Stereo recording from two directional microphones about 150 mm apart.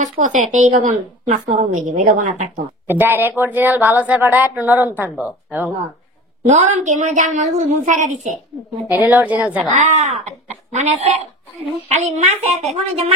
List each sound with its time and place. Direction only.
0.0 s a woman's voice: 55° right (ahead or behind)
2.9 s a woman's voice: 15° right (ahead or behind)
6.4 s a woman's voice: 50° right (ahead or behind)
8.9 s a woman's voice: 10° right (ahead or behind)
9.7 s a woman's voice: 55° right (ahead or behind)